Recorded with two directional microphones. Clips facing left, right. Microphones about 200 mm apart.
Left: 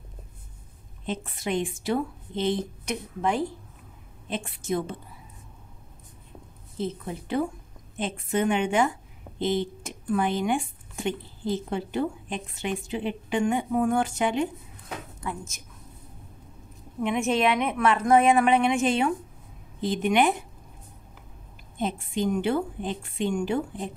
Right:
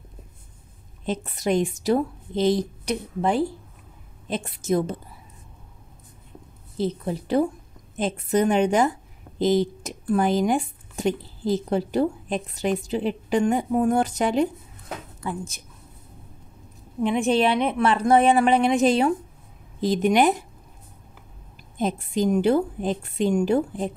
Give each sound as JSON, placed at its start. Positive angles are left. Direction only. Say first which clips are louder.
{"t": 1.0, "sound": "speech", "louder": "right 6 dB", "side_deg": -40}
{"t": 6.8, "sound": "speech", "louder": "right 5 dB", "side_deg": -35}
{"t": 17.0, "sound": "speech", "louder": "right 3 dB", "side_deg": -35}
{"t": 21.7, "sound": "speech", "louder": "right 4 dB", "side_deg": -40}